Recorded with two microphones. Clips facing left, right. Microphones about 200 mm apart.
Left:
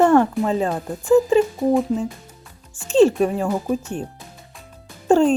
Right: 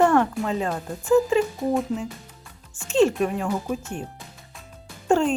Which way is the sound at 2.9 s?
35° left (ahead or behind).